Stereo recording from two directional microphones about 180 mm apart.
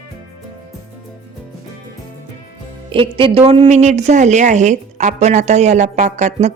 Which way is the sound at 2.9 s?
30° right (ahead or behind).